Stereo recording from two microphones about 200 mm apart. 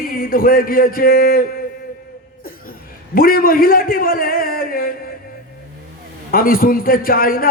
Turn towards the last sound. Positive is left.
turn(degrees=45)  # may be behind; listen again after turning